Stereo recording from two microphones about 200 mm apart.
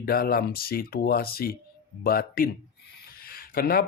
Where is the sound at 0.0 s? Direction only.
50° left (ahead or behind).